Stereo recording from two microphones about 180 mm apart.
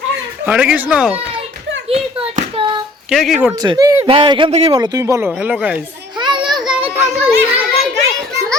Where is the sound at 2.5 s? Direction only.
25° right (ahead or behind).